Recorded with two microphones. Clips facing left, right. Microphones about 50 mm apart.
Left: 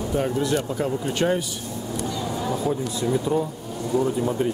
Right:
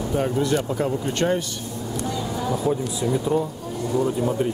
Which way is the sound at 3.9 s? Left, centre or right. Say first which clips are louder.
Even; centre.